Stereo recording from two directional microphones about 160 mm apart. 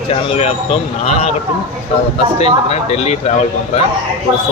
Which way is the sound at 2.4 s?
40° left (ahead or behind).